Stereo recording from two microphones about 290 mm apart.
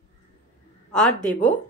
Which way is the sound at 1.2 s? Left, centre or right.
Left.